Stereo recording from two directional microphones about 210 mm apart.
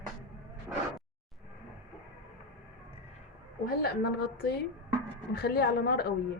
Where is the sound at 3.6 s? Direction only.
45° left (ahead or behind).